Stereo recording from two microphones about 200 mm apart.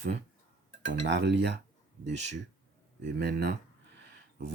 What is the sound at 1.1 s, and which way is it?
Speech, 60° right (ahead or behind).